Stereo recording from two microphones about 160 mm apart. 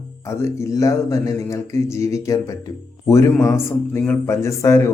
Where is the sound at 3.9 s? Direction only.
10° left (ahead or behind).